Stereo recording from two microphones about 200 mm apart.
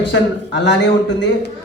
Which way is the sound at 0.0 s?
60° left (ahead or behind).